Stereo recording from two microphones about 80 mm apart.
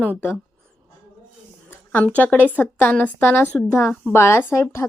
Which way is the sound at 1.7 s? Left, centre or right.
Left.